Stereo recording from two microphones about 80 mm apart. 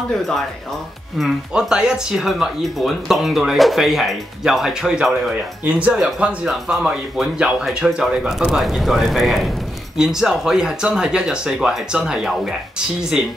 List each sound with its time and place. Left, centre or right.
1.5 s speech: centre
5.3 s speech: centre
5.9 s speech: centre